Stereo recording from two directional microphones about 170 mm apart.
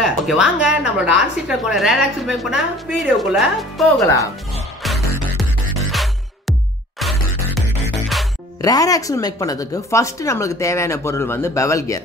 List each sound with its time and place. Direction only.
0.0 s a woman's voice: 5° right (ahead or behind)
5.8 s music: centre (ahead or behind)
8.5 s a woman's voice: 20° left (ahead or behind)